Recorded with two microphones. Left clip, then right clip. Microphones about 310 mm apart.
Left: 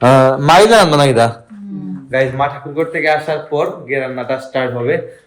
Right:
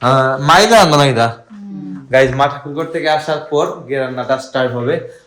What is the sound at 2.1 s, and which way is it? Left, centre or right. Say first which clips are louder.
Speech: right 4 dB; right.